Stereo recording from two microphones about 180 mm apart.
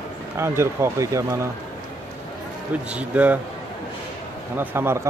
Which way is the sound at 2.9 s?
5° right (ahead or behind).